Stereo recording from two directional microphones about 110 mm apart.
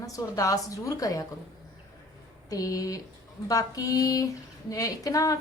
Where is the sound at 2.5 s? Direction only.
35° left (ahead or behind).